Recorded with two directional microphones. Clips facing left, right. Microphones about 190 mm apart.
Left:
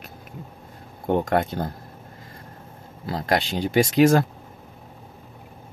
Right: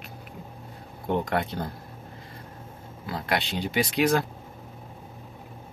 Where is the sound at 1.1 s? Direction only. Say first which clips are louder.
Left 5 dB; 45° left (ahead or behind).